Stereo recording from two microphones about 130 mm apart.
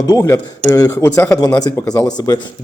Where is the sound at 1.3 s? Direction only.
30° left (ahead or behind).